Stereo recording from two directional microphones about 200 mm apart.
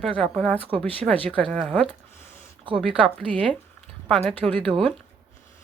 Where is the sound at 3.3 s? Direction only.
25° right (ahead or behind).